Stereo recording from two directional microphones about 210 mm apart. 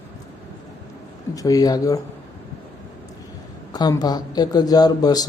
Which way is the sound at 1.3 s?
15° left (ahead or behind).